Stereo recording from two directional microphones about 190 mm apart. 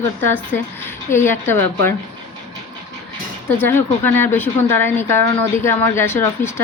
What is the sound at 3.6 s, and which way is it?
Speech, 10° left (ahead or behind).